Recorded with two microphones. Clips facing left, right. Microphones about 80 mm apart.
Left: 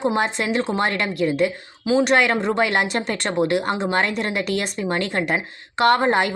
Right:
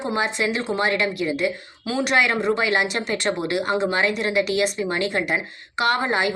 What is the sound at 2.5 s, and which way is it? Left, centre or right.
A woman's voice, left.